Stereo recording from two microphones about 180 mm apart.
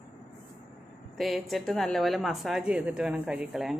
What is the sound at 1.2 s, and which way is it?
A woman's voice, centre (ahead or behind).